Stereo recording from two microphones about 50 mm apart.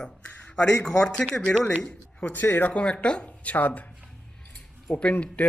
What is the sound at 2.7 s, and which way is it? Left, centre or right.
Speech, left.